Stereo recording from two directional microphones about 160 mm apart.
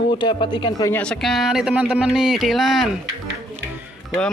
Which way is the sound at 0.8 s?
10° left (ahead or behind).